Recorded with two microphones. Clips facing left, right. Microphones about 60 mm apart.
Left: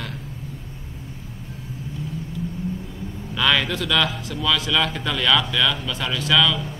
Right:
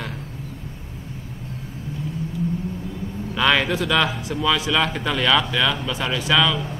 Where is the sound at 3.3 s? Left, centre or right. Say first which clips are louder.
Right 2 dB; centre.